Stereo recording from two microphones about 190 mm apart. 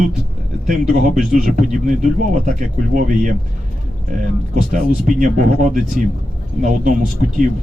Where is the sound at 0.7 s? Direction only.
45° right (ahead or behind).